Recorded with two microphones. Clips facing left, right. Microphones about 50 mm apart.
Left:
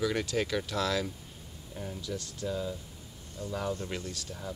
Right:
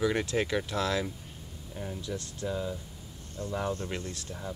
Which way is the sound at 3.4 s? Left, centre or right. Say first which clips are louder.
Right 2 dB; right.